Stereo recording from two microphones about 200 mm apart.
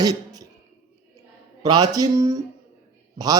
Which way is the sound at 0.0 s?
20° right (ahead or behind).